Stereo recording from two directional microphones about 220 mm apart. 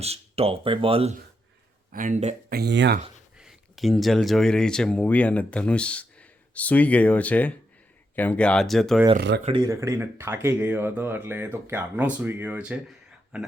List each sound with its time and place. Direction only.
0.0 s speech: 25° right (ahead or behind)
1.9 s speech: 35° right (ahead or behind)
2.6 s speech: 50° right (ahead or behind)
3.3 s speech: centre (ahead or behind)
9.1 s speech: 50° right (ahead or behind)
9.4 s speech: 20° right (ahead or behind); by 12.8 s 5° right (ahead or behind)